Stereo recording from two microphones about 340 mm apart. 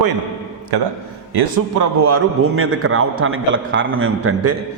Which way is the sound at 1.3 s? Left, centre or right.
Right.